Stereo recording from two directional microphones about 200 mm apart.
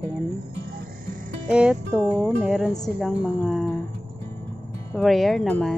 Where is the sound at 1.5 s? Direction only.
5° right (ahead or behind).